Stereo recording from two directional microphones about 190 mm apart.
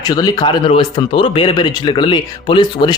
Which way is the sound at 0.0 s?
20° left (ahead or behind).